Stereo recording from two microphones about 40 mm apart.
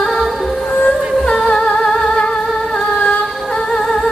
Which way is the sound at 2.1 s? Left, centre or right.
Left.